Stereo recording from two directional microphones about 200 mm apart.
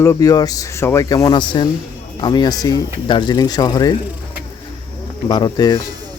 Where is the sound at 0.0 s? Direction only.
15° left (ahead or behind).